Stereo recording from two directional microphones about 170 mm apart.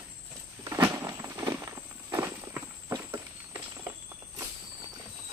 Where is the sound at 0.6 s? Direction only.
20° right (ahead or behind).